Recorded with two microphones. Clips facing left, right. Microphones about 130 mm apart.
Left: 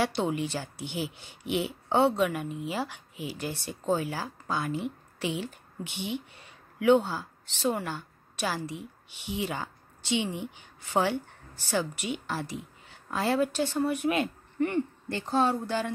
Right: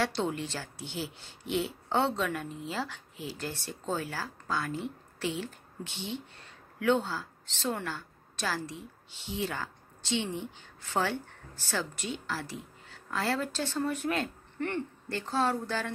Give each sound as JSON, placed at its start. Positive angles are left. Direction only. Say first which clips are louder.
{"t": 0.0, "sound": "speech", "louder": "left 3 dB", "side_deg": 15}